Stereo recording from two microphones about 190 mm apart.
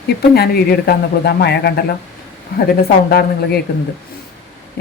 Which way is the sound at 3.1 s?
55° left (ahead or behind).